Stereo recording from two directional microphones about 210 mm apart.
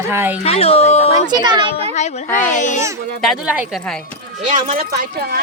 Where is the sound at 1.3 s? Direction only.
20° right (ahead or behind).